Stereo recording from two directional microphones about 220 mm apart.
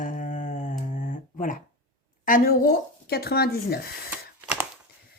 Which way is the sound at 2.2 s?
40° left (ahead or behind).